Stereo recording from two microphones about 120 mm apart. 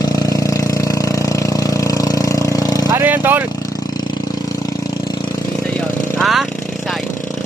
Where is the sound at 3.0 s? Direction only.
15° right (ahead or behind).